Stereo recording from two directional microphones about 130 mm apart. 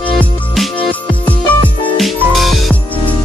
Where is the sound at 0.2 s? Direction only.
10° left (ahead or behind).